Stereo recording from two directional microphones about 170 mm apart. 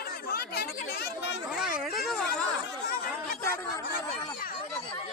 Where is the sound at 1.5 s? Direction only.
Centre (ahead or behind).